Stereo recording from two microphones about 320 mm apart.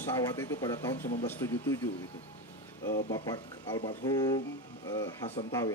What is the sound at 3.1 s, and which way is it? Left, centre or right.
A man's voice, centre.